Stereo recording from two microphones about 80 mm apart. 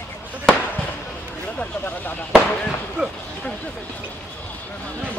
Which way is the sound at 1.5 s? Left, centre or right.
Centre.